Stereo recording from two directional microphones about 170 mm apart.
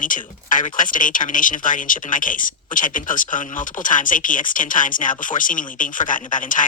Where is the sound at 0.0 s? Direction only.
50° left (ahead or behind).